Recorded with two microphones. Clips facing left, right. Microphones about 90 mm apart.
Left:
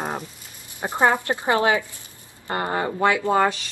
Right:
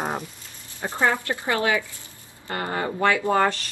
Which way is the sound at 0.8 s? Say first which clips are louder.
Left 3 dB; 20° left (ahead or behind).